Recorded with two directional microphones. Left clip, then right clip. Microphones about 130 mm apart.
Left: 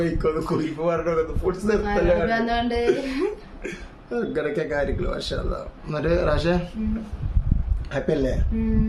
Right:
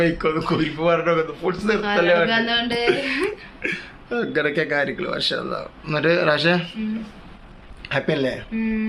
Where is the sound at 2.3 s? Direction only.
30° left (ahead or behind).